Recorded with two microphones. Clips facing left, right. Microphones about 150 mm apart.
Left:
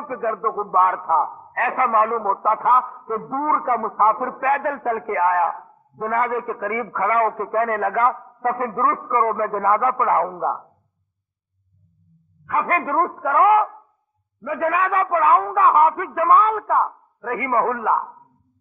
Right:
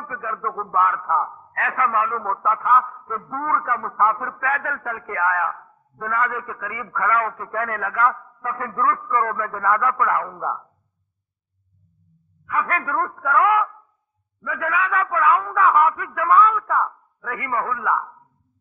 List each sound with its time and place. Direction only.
0.0 s a man's voice: 35° left (ahead or behind)
12.4 s a man's voice: 30° left (ahead or behind)
15.5 s a man's voice: 25° left (ahead or behind)